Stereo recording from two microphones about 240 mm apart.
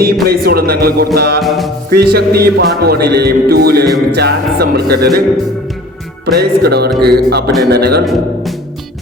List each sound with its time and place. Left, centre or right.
0.0 s music: right
1.4 s music: centre
1.9 s music: right
6.3 s music: right